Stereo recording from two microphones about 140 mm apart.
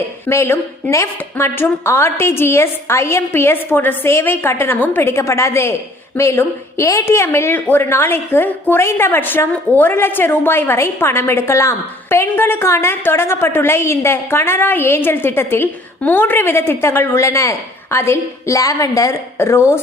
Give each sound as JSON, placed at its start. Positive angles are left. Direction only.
{"t": 0.3, "sound": "a woman's voice", "side_deg": 20}